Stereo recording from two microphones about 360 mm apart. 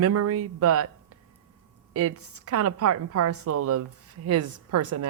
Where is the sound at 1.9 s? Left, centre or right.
Right.